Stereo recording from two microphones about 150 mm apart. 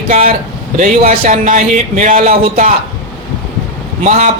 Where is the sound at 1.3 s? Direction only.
55° right (ahead or behind).